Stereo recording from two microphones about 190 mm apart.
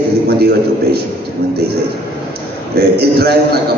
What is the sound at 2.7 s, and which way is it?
Speech, 55° right (ahead or behind).